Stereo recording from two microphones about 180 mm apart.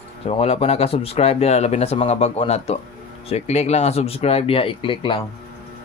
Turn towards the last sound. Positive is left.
turn(degrees=30)  # may be behind; listen again after turning